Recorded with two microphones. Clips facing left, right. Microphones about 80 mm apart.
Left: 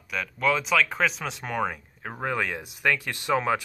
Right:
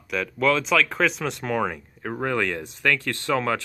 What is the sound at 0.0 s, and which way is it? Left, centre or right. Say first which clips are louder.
Speech: right 4 dB; centre.